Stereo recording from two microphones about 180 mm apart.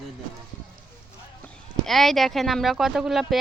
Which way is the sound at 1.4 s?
Centre (ahead or behind).